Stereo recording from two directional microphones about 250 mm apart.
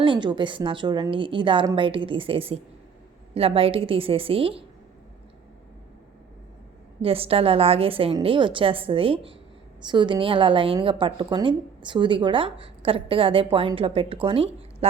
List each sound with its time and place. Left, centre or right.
0.0 s a woman's voice: centre
7.0 s a woman's voice: right